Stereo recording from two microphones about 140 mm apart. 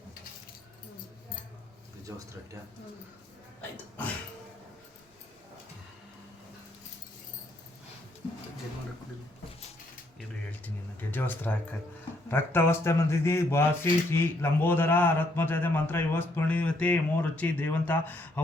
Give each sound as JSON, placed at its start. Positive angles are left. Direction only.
{"t": 2.1, "sound": "speech", "side_deg": -20}
{"t": 11.1, "sound": "speech", "side_deg": 15}